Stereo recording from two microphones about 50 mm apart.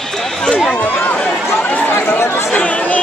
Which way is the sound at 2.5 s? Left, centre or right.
Left.